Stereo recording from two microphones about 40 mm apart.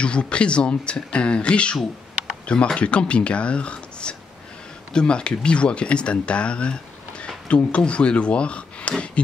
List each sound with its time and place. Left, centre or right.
0.0 s speech: left